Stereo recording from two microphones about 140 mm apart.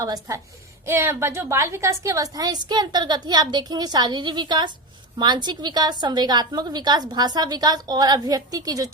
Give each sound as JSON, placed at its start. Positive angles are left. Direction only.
{"t": 0.0, "sound": "a woman's voice", "side_deg": -25}